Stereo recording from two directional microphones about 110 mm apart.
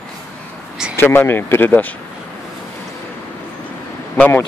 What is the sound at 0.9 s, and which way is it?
Speech, 20° left (ahead or behind).